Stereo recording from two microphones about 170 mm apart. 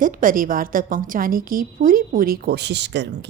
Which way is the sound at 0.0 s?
55° right (ahead or behind).